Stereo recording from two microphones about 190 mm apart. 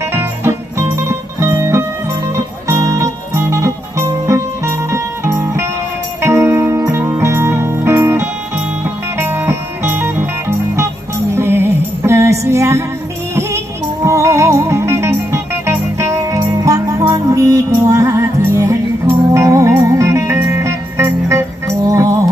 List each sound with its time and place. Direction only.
0.1 s music: 15° right (ahead or behind)
14.0 s music: 15° right (ahead or behind)